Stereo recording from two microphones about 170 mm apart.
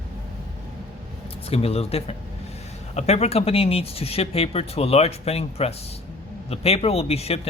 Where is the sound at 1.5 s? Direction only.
35° left (ahead or behind).